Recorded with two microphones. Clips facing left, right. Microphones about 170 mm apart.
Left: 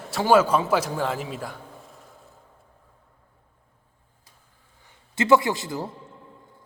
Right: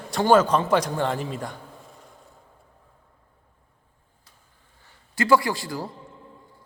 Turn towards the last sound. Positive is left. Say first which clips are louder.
# left 1 dB
turn(degrees=20)  # may be behind; listen again after turning